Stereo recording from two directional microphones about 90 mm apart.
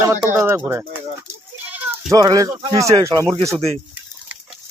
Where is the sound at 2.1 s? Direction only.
40° right (ahead or behind).